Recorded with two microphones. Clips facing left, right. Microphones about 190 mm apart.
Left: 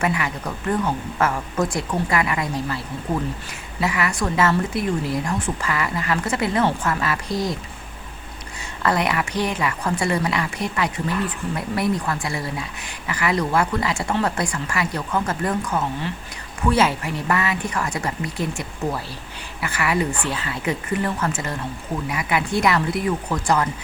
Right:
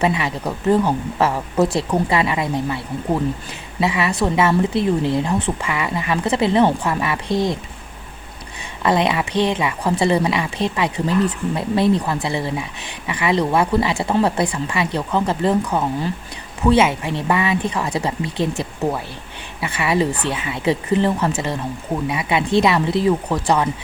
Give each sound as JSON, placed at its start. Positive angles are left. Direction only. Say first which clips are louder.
{"t": 0.0, "sound": "speech", "louder": "right 4 dB", "side_deg": -25}
{"t": 8.8, "sound": "speech", "louder": "right 4 dB", "side_deg": -20}
{"t": 16.8, "sound": "speech", "louder": "right 2 dB", "side_deg": -25}